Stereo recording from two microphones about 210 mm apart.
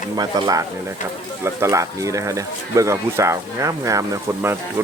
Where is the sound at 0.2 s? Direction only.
20° right (ahead or behind).